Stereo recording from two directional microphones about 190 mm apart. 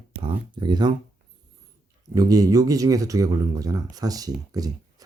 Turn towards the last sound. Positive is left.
turn(degrees=-20)  # may be behind; listen again after turning